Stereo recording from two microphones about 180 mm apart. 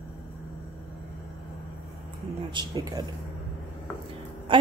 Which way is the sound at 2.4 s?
25° right (ahead or behind).